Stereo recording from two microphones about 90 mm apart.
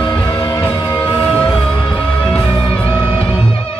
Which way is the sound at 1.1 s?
15° left (ahead or behind).